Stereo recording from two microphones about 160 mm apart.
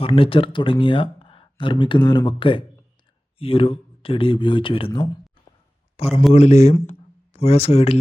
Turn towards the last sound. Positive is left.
turn(degrees=40)  # may be behind; listen again after turning